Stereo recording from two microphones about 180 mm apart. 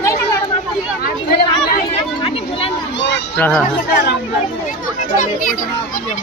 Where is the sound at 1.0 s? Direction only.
60° left (ahead or behind).